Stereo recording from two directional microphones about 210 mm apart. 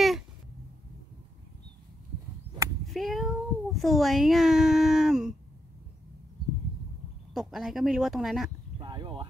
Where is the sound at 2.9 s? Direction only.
Centre (ahead or behind).